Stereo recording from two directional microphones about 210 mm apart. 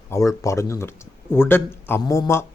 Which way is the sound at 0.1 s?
15° left (ahead or behind).